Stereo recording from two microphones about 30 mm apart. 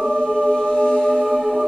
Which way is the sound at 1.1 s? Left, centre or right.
Centre.